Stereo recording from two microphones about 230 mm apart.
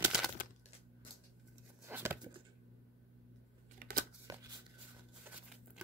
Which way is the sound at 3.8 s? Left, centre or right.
Right.